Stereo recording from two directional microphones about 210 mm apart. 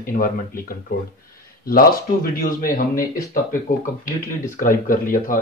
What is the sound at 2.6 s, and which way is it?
Speech, 40° left (ahead or behind).